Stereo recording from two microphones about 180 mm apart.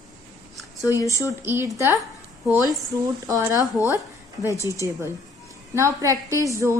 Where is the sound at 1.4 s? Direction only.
15° right (ahead or behind).